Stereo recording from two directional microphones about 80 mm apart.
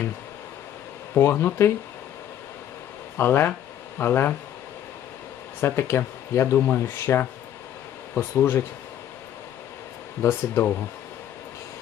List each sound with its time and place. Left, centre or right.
1.1 s speech: left
3.2 s speech: left
5.6 s speech: left
10.2 s speech: left